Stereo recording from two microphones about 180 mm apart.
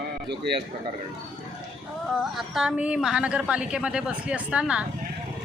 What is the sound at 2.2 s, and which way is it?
A woman's voice, centre (ahead or behind).